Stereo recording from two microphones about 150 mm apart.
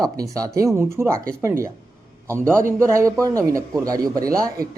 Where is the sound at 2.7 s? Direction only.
20° right (ahead or behind).